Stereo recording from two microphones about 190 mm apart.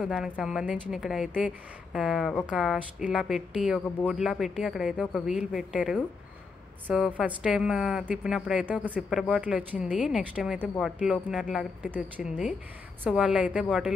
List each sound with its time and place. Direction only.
0.0 s a woman's voice: centre (ahead or behind)
7.2 s a woman's voice: 5° right (ahead or behind)